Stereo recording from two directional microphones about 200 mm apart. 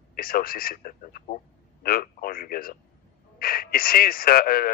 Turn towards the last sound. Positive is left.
turn(degrees=45)  # may be behind; listen again after turning